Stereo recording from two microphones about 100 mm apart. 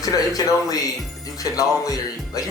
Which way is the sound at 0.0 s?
35° left (ahead or behind).